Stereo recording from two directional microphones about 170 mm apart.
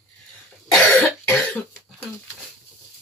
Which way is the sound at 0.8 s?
10° left (ahead or behind).